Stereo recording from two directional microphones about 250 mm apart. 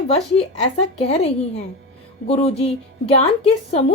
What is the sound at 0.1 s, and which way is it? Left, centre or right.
A woman's voice, left.